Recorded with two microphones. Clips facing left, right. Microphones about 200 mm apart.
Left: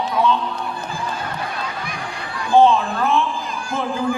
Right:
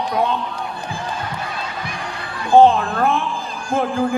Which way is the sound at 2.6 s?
55° right (ahead or behind).